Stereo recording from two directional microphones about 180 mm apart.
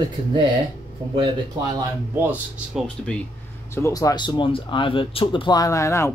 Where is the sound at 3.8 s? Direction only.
15° left (ahead or behind).